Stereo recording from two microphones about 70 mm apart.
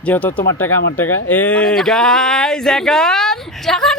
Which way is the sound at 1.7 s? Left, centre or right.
Centre.